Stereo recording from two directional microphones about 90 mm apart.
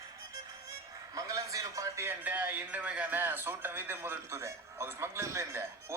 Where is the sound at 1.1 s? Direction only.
40° right (ahead or behind).